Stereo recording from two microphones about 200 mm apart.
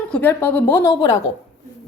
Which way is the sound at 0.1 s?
10° left (ahead or behind).